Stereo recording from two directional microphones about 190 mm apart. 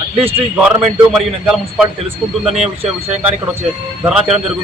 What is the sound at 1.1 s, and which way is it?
Speech, 5° right (ahead or behind).